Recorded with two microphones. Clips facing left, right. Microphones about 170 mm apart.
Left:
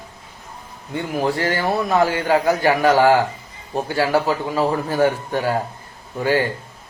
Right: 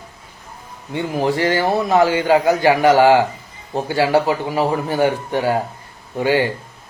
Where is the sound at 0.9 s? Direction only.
20° right (ahead or behind).